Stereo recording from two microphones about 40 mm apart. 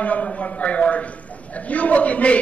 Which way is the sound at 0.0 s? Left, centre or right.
Left.